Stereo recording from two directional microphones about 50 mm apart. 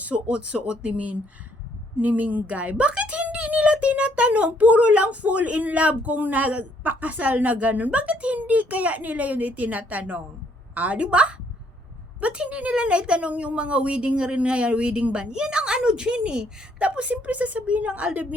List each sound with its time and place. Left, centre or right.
0.3 s a woman's voice: right